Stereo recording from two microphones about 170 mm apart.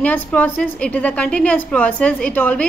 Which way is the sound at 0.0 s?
10° left (ahead or behind).